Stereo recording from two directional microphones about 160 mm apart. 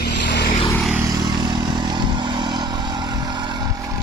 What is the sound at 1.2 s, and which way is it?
Vehicle, 25° right (ahead or behind).